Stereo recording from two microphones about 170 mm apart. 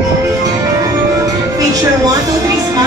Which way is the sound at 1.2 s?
20° right (ahead or behind).